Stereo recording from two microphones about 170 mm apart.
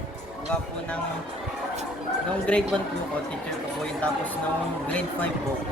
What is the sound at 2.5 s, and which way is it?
Speech, 5° left (ahead or behind).